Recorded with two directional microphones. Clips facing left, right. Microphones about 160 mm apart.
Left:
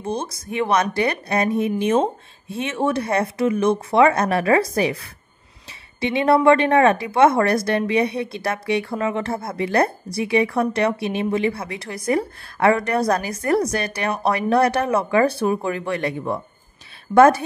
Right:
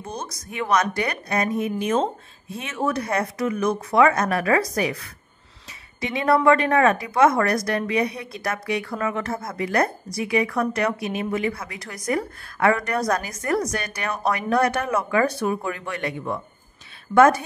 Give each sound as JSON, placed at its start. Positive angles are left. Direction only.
{"t": 0.0, "sound": "a woman's voice", "side_deg": 30}